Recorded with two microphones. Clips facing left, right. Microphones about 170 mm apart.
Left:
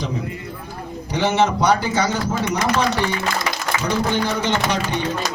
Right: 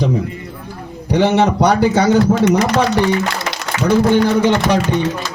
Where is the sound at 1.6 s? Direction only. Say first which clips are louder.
Right 6 dB; 60° right (ahead or behind).